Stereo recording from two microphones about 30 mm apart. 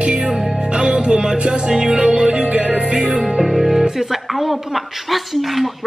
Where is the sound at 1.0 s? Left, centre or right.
Centre.